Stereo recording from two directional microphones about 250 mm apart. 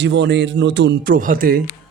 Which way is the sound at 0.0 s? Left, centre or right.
Right.